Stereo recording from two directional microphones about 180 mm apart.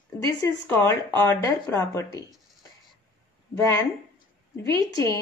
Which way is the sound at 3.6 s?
15° left (ahead or behind).